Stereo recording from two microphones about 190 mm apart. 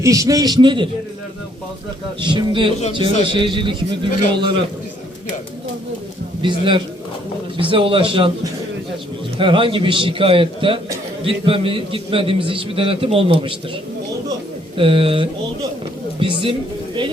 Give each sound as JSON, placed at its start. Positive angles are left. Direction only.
{"t": 0.0, "sound": "a man's voice", "side_deg": -15}
{"t": 2.2, "sound": "a man's voice", "side_deg": -25}
{"t": 6.4, "sound": "a man's voice", "side_deg": -25}
{"t": 9.4, "sound": "a man's voice", "side_deg": -25}
{"t": 14.8, "sound": "a man's voice", "side_deg": -30}